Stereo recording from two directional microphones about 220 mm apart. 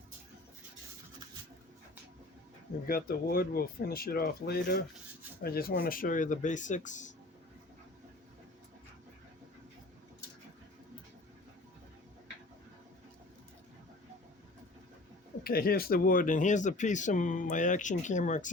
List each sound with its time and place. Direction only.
2.8 s speech: 40° left (ahead or behind)
15.4 s speech: 45° left (ahead or behind)